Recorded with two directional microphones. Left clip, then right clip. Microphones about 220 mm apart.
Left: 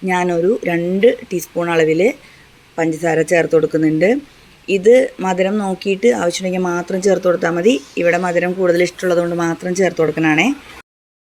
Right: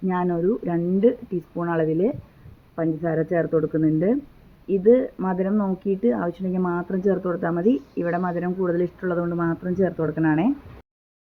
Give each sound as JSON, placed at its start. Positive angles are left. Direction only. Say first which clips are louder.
{"t": 0.3, "sound": "speech", "louder": "left 7 dB", "side_deg": 35}
{"t": 0.6, "sound": "speech", "louder": "left 7 dB", "side_deg": 50}
{"t": 2.7, "sound": "speech", "louder": "left 8 dB", "side_deg": 40}
{"t": 5.9, "sound": "speech", "louder": "left 9 dB", "side_deg": 50}
{"t": 6.2, "sound": "speech", "louder": "left 8 dB", "side_deg": 35}
{"t": 7.7, "sound": "speech", "louder": "left 9 dB", "side_deg": 55}
{"t": 8.2, "sound": "speech", "louder": "left 9 dB", "side_deg": 40}